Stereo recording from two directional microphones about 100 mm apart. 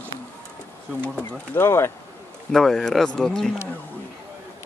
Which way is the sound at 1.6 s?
25° left (ahead or behind).